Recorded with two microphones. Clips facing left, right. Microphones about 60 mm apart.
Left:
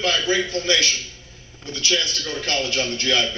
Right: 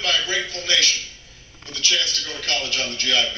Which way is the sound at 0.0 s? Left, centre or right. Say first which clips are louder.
Left 3 dB; left.